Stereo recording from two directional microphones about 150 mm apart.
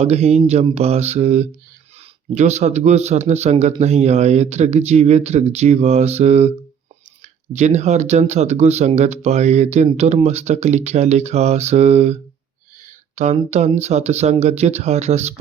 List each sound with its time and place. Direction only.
0.0 s speech: 45° right (ahead or behind)
7.5 s speech: 50° right (ahead or behind)